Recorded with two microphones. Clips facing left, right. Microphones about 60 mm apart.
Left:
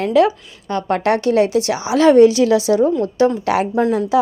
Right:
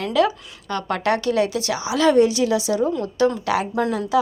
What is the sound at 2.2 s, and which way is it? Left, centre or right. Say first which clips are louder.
Speech: left 6 dB; left.